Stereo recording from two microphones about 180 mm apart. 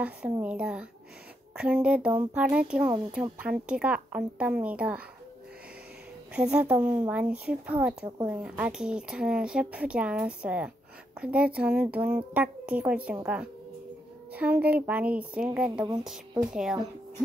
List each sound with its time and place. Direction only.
0.0 s a woman's voice: 5° right (ahead or behind)
6.3 s a woman's voice: 5° right (ahead or behind)